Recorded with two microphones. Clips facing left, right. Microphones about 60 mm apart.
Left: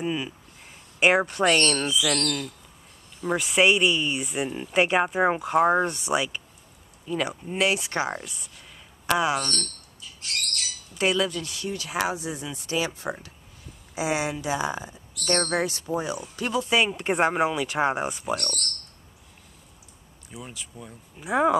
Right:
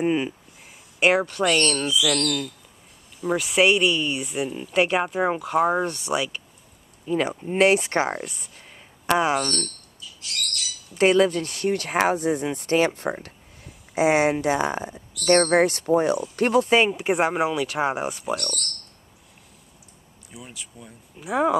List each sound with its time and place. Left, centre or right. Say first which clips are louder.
0.0 s speech: right 6 dB; right
0.9 s speech: right 1 dB; centre
1.2 s speech: even; left
1.9 s speech: right 2 dB; left
3.2 s speech: right 2 dB; centre
7.1 s speech: right 4 dB; right
7.5 s speech: right 6 dB; right
9.9 s bird: even; left
11.0 s speech: right 6 dB; right
16.9 s speech: right 1 dB; centre
18.3 s speech: right 1 dB; left
20.2 s speech: left 1 dB; centre